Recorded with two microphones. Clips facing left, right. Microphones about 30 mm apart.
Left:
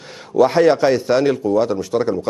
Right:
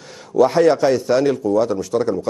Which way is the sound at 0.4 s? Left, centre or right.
Left.